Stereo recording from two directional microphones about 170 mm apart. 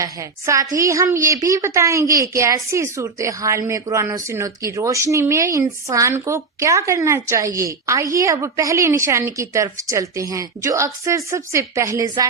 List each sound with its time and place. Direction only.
0.0 s a woman's voice: 20° right (ahead or behind)